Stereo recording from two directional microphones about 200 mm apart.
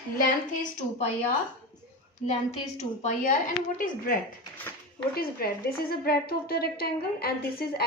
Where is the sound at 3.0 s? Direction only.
35° left (ahead or behind).